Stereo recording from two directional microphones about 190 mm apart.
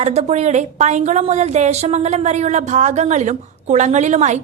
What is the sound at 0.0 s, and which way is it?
Speech, 35° right (ahead or behind).